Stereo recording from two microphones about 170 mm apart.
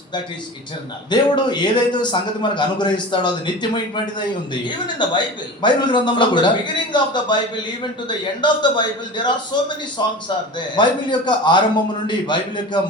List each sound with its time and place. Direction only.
1.1 s a man's voice: 25° left (ahead or behind)